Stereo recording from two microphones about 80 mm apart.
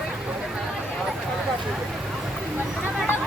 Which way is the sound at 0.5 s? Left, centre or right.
Centre.